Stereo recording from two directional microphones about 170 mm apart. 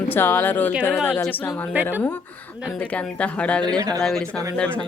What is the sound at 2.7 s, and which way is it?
Speech, 5° left (ahead or behind).